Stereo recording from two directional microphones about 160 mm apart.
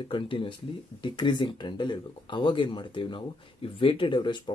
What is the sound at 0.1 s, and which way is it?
Speech, 30° left (ahead or behind).